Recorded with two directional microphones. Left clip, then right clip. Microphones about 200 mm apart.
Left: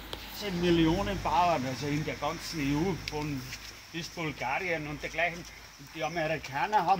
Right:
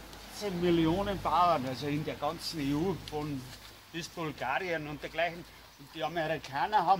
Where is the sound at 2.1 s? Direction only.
Centre (ahead or behind).